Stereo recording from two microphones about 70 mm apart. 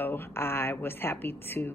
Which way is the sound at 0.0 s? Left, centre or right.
Left.